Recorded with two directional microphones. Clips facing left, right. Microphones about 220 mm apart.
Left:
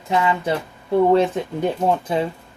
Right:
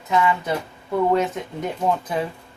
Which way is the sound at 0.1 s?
30° left (ahead or behind).